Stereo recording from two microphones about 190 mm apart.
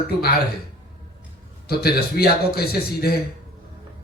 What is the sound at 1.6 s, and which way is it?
A man's voice, 55° left (ahead or behind).